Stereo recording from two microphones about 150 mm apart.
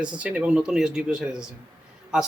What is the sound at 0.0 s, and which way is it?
Speech, 10° right (ahead or behind).